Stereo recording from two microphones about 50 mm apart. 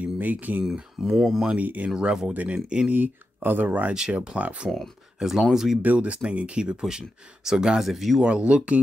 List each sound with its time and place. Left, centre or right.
0.2 s speech: right
1.1 s speech: centre
1.6 s speech: right
2.0 s speech: centre
2.9 s speech: right
4.1 s speech: centre
4.4 s speech: right
4.6 s speech: centre
5.8 s speech: right; by 8.2 s centre
8.2 s speech: right